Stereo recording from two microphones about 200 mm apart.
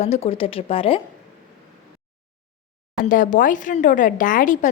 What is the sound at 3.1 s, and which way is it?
A woman's voice, 40° left (ahead or behind).